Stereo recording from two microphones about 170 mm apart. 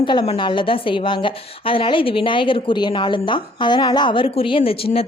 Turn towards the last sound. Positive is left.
turn(degrees=35)  # may be behind; listen again after turning